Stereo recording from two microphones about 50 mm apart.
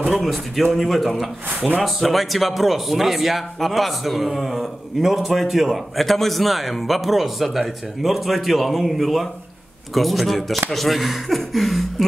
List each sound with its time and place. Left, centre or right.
0.1 s speech: centre